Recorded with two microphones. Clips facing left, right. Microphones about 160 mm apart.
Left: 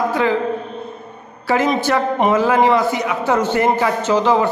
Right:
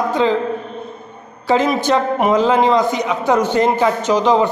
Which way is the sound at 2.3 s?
20° right (ahead or behind).